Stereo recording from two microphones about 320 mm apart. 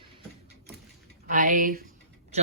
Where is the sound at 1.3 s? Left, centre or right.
Right.